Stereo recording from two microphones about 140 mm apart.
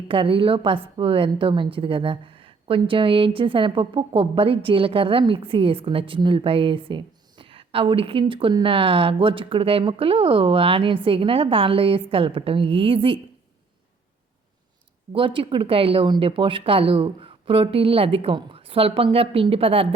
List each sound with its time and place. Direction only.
0.1 s a woman's voice: 40° right (ahead or behind)
15.1 s a woman's voice: 40° right (ahead or behind)